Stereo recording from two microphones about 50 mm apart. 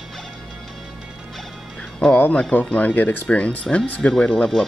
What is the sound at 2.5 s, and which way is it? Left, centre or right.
Speech, left.